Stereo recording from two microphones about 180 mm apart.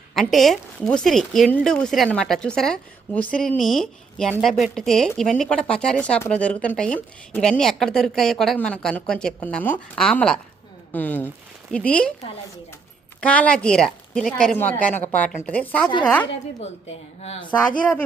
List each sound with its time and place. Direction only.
0.2 s a woman's voice: centre (ahead or behind)
13.2 s a woman's voice: 5° left (ahead or behind)
17.2 s speech: 35° left (ahead or behind)